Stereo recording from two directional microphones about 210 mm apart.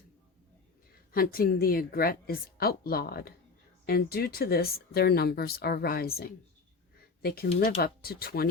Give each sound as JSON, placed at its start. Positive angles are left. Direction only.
{"t": 1.1, "sound": "speech", "side_deg": 45}